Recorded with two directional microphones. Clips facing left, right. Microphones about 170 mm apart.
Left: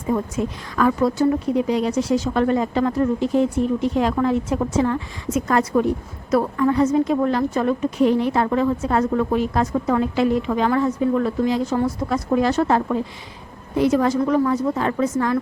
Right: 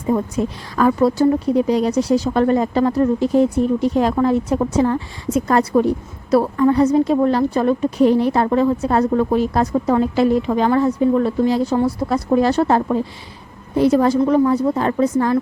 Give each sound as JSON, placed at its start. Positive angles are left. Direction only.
{"t": 0.1, "sound": "a woman's voice", "side_deg": -35}